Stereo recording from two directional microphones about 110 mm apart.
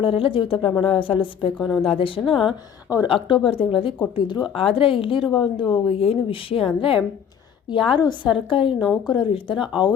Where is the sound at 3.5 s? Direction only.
55° left (ahead or behind).